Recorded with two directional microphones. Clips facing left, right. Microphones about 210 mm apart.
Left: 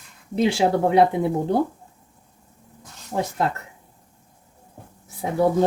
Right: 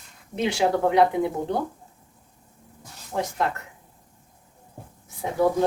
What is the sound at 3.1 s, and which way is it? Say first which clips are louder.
Speech: left 2 dB; 35° left (ahead or behind).